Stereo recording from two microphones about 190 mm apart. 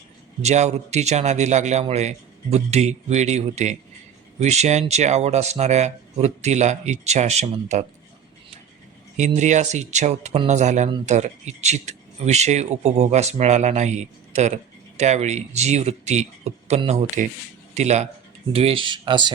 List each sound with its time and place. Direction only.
0.4 s speech: 35° right (ahead or behind)
9.1 s speech: 40° right (ahead or behind)